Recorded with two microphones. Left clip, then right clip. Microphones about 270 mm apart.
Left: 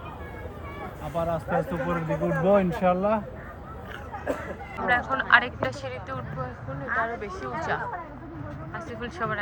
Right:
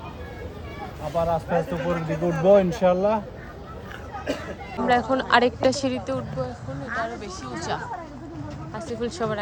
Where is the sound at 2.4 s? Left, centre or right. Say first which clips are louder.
Right 5 dB; right.